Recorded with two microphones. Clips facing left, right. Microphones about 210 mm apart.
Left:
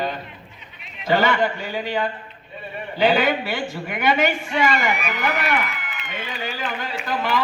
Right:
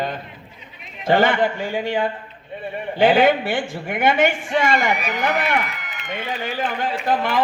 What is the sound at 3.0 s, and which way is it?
A man's voice, 50° right (ahead or behind).